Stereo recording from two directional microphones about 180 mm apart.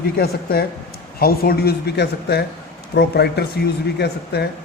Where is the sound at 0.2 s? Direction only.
60° left (ahead or behind).